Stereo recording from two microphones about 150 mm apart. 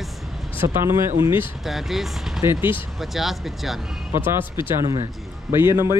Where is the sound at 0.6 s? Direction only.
15° right (ahead or behind).